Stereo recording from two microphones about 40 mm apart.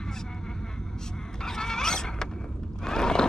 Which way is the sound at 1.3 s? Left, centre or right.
Centre.